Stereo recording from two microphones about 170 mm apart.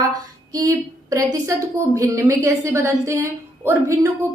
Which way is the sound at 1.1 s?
20° right (ahead or behind).